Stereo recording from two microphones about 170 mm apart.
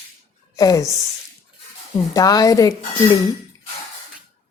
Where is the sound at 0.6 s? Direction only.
20° left (ahead or behind).